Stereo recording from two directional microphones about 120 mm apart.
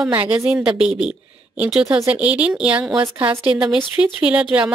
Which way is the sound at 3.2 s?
50° right (ahead or behind).